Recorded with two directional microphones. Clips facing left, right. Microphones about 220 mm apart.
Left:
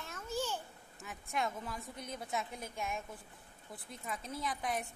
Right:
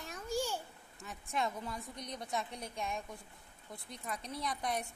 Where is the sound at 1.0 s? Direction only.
Centre (ahead or behind).